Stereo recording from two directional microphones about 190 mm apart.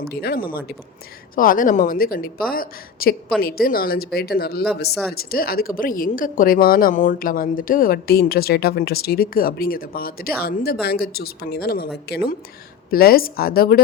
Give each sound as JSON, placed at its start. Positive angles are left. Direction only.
{"t": 0.0, "sound": "speech", "side_deg": 55}